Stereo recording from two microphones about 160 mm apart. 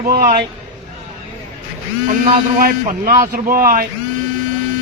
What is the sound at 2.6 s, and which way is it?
Speech, 60° right (ahead or behind).